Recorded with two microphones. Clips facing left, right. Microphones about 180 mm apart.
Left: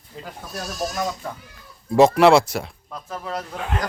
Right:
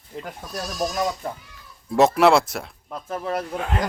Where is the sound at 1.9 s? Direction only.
Centre (ahead or behind).